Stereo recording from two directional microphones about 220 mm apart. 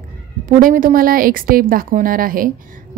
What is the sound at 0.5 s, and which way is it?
A woman's voice, 40° right (ahead or behind).